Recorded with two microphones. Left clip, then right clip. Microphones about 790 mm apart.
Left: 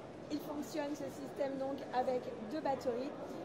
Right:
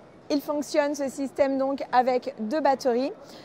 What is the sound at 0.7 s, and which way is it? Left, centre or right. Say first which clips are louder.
Speech: right 17 dB; right.